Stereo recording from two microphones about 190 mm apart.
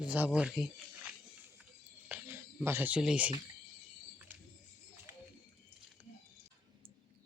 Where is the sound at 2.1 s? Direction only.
10° right (ahead or behind).